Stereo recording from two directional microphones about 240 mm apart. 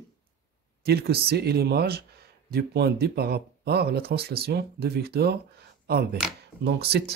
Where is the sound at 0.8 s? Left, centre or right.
Right.